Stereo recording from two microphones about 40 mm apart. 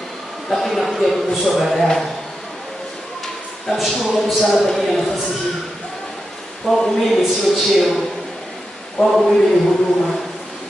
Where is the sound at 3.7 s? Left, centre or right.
Centre.